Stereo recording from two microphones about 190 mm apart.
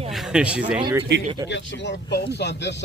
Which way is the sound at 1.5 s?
70° left (ahead or behind).